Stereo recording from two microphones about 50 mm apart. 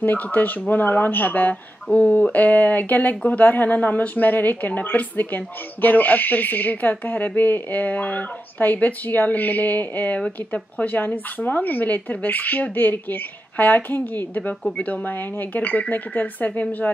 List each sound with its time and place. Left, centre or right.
0.0 s a woman's voice: left